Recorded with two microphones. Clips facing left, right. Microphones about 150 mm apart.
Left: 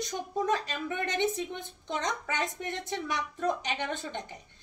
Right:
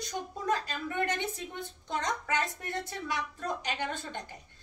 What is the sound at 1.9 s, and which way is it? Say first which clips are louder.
A woman's voice: even; 20° left (ahead or behind).